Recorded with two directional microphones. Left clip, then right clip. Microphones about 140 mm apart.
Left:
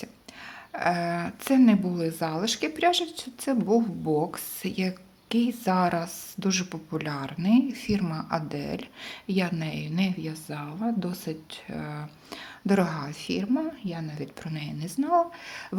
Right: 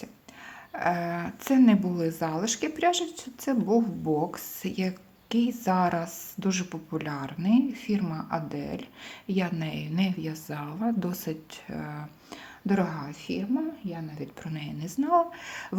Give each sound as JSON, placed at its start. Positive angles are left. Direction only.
{"t": 0.7, "sound": "speech", "side_deg": 15}
{"t": 11.8, "sound": "speech", "side_deg": 15}
{"t": 12.6, "sound": "a woman's voice", "side_deg": 30}
{"t": 14.4, "sound": "speech", "side_deg": 15}